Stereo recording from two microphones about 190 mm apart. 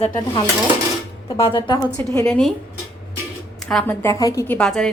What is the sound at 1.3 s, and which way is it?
Speech, 20° left (ahead or behind).